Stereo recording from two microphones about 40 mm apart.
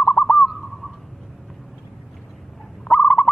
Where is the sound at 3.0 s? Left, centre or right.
Left.